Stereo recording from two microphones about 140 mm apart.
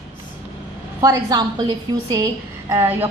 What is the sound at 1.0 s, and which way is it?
A woman's voice, 30° right (ahead or behind).